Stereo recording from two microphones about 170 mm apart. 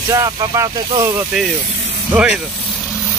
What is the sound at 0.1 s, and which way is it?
Speech, 20° right (ahead or behind).